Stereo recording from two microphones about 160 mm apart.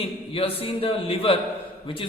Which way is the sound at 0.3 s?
35° left (ahead or behind).